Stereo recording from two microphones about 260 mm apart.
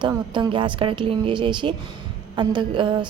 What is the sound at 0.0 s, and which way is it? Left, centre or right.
A woman's voice, centre.